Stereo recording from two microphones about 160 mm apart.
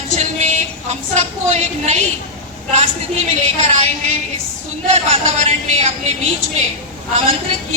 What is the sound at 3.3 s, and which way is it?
A woman's voice, 45° right (ahead or behind).